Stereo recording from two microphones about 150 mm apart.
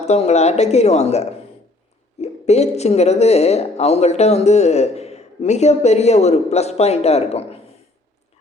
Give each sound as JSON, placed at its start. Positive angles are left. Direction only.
{"t": 0.0, "sound": "speech", "side_deg": 50}